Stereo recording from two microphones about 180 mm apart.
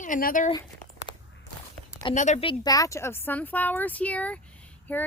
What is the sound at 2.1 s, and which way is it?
Speech, 40° left (ahead or behind).